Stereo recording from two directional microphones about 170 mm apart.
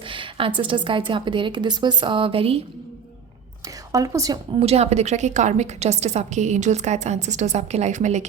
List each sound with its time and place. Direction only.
0.1 s a sound: 30° right (ahead or behind)
0.7 s a woman's voice: 30° right (ahead or behind)
3.9 s a woman's voice: 20° right (ahead or behind)
4.6 s a woman's voice: 40° right (ahead or behind)